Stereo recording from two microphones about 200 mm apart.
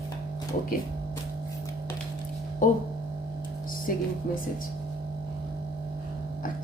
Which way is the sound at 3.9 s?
45° left (ahead or behind).